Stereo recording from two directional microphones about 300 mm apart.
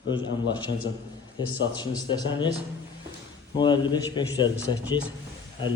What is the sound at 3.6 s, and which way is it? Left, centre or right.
Speech, centre.